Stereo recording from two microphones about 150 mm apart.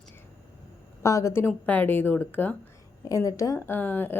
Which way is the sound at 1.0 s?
20° left (ahead or behind).